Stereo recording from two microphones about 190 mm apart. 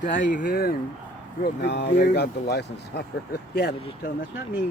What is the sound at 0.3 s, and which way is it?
Speech, 50° left (ahead or behind).